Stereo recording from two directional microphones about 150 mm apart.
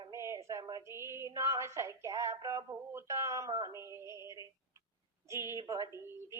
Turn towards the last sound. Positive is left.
turn(degrees=-20)  # may be behind; listen again after turning